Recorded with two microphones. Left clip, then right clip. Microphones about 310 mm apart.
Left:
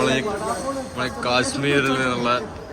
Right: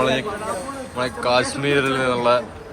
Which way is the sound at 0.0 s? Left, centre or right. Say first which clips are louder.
Right 1 dB; centre.